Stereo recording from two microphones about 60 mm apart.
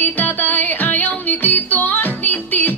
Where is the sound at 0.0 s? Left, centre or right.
Left.